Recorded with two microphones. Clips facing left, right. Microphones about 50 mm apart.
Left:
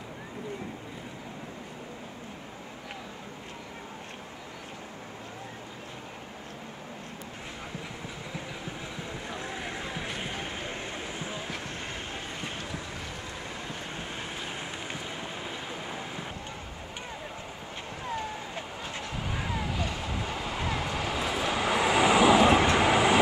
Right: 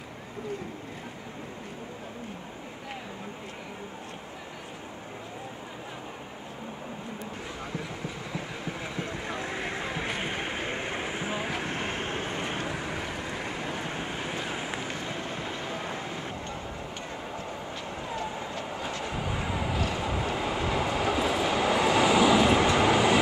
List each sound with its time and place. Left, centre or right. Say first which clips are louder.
9.3 s vehicle: right 2 dB; right
14.9 s boat: right 3 dB; centre
19.0 s vehicle: right 1 dB; centre